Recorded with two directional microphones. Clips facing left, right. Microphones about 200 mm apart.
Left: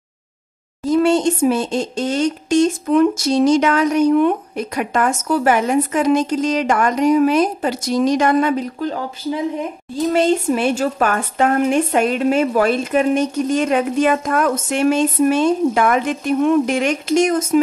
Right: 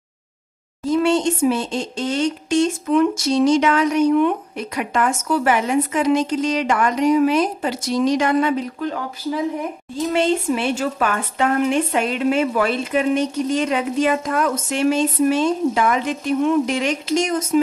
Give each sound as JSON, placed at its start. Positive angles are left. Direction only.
{"t": 0.8, "sound": "speech", "side_deg": 40}
{"t": 10.1, "sound": "speech", "side_deg": 40}